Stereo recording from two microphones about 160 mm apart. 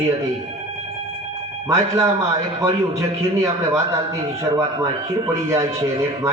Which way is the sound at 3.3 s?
20° right (ahead or behind).